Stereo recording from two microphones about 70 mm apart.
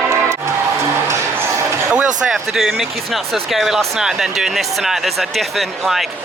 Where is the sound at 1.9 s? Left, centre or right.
Centre.